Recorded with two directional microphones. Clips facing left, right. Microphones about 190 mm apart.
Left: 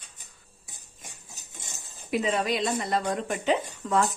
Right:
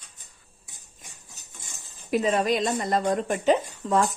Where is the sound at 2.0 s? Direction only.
40° right (ahead or behind).